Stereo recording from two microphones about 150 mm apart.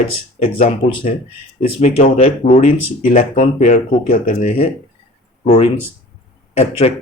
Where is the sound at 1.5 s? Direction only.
60° left (ahead or behind).